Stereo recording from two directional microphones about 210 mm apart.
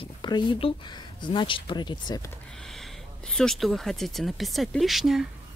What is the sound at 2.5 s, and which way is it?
Speech, centre (ahead or behind).